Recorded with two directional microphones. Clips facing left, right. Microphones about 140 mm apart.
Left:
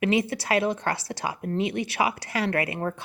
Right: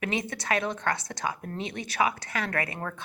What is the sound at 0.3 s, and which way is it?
Speech, 30° left (ahead or behind).